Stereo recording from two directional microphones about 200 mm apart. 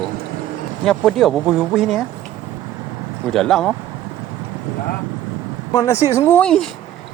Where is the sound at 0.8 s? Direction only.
Centre (ahead or behind).